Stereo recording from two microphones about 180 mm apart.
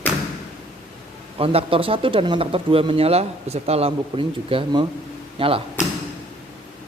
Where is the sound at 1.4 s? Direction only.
30° right (ahead or behind).